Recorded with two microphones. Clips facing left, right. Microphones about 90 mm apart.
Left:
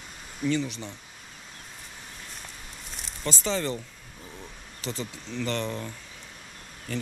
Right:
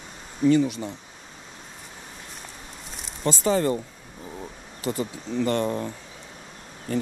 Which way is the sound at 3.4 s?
45° right (ahead or behind).